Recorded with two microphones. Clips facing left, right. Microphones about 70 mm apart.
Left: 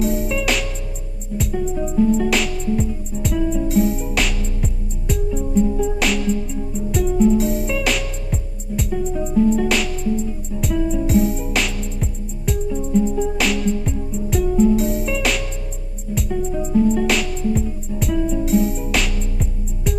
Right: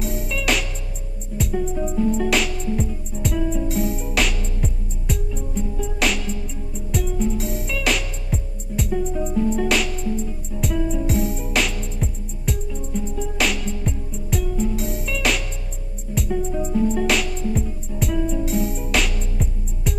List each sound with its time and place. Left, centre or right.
0.0 s music: centre